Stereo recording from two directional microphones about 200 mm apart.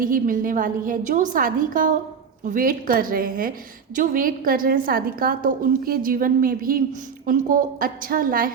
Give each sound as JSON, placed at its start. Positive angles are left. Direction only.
{"t": 0.0, "sound": "a woman's voice", "side_deg": -45}